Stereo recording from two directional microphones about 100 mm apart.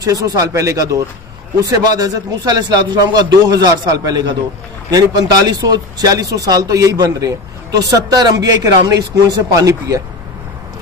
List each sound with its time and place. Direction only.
0.0 s a man's voice: 35° right (ahead or behind)